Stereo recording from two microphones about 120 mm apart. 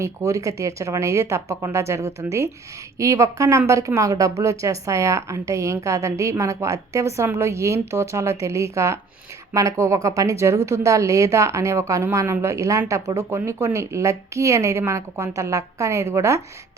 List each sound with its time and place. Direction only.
0.0 s a woman's voice: 25° right (ahead or behind)